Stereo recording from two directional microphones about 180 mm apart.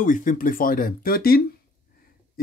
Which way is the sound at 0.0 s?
45° left (ahead or behind).